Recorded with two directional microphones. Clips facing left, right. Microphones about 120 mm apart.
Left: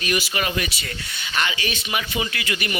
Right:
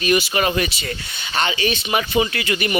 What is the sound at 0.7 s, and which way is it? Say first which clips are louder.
A man's voice: right 4 dB; 25° right (ahead or behind).